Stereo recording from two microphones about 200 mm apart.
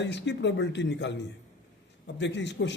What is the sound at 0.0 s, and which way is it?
Speech, 60° left (ahead or behind).